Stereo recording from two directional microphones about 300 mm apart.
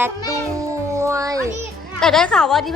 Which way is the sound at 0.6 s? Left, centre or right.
Centre.